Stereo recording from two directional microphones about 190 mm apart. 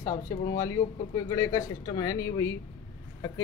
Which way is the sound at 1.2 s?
20° left (ahead or behind).